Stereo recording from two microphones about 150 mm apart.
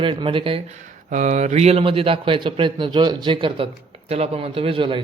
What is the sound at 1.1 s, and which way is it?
A man's voice, 55° right (ahead or behind).